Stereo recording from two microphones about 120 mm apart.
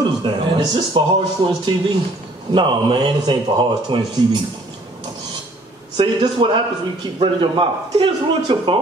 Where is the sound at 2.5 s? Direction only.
40° right (ahead or behind).